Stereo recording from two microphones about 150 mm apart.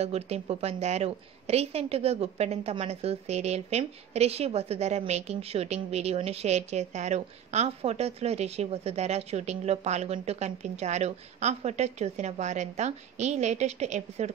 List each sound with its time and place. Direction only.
0.0 s a woman's voice: 45° right (ahead or behind)